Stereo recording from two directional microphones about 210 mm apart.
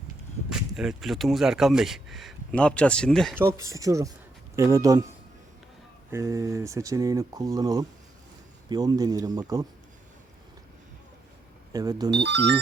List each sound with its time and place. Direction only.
0.5 s speech: centre (ahead or behind)
3.3 s speech: 15° right (ahead or behind)
6.1 s speech: 15° right (ahead or behind)
11.7 s speech: 20° right (ahead or behind)
12.1 s speech: 55° right (ahead or behind)